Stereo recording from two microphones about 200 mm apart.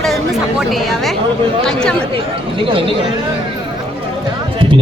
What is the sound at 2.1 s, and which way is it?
Speech, 25° right (ahead or behind).